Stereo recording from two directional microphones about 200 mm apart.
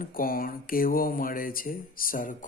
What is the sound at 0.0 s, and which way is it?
Speech, 45° left (ahead or behind).